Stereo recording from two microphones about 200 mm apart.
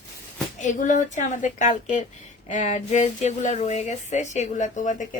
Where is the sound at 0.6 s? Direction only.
40° left (ahead or behind).